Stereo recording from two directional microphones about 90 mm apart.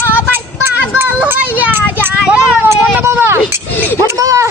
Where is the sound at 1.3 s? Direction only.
15° right (ahead or behind).